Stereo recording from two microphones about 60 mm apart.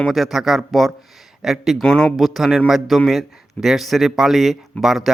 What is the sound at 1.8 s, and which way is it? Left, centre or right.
Speech, centre.